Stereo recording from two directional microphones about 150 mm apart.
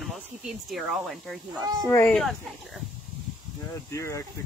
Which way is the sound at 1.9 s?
15° left (ahead or behind).